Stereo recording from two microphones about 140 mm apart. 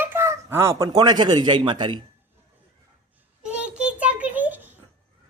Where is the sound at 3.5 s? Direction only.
10° right (ahead or behind).